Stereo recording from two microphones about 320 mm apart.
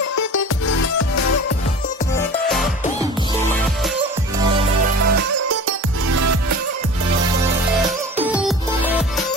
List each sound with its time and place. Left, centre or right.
0.2 s music: left
5.0 s music: right
8.2 s music: centre